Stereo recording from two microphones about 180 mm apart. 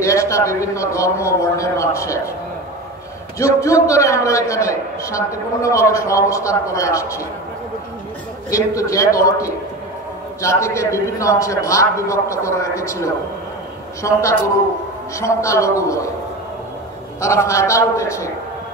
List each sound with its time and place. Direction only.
0.0 s a man's voice: 15° left (ahead or behind)
3.3 s a man's voice: 20° left (ahead or behind)
8.5 s a man's voice: 20° left (ahead or behind)
10.4 s a man's voice: 15° left (ahead or behind)
17.2 s a man's voice: 15° left (ahead or behind)